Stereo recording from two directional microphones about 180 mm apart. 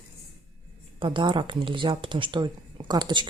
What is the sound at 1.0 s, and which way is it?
Speech, 25° right (ahead or behind).